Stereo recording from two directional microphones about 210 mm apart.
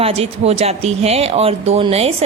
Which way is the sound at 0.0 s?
30° right (ahead or behind).